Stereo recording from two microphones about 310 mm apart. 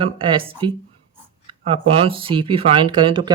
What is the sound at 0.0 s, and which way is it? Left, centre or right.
Speech, centre.